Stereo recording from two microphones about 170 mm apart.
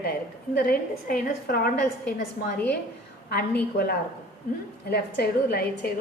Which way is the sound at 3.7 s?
65° left (ahead or behind).